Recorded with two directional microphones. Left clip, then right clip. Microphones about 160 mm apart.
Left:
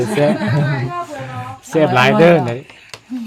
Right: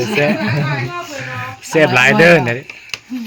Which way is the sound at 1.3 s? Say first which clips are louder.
Right 5 dB; 10° left (ahead or behind).